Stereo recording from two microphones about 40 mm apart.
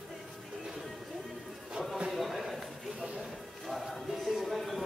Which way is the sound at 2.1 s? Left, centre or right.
Centre.